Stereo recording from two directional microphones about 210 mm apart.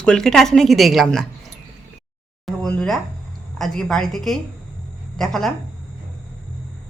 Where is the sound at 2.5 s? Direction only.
5° left (ahead or behind).